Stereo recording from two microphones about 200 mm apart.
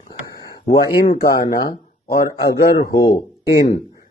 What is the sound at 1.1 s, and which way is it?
A man's voice, 50° left (ahead or behind).